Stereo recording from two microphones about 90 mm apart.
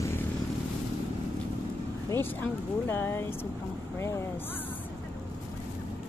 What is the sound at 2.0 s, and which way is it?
Speech, 25° left (ahead or behind).